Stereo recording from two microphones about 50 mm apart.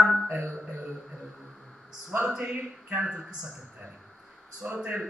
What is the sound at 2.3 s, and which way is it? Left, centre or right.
Speech, right.